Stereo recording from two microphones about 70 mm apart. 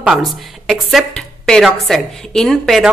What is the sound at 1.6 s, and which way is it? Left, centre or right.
Speech, centre.